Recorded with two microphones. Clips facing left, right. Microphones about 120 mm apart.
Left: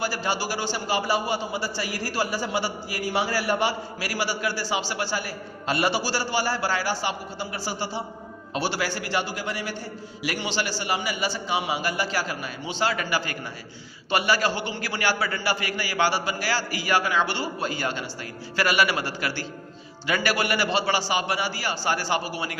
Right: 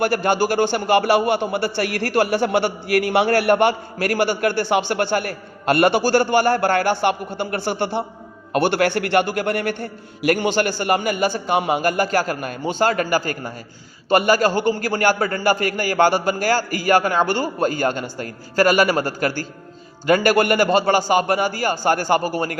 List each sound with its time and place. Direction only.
0.0 s a man's voice: 55° right (ahead or behind)